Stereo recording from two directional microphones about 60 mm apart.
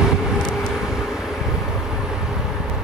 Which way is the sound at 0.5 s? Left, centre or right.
Centre.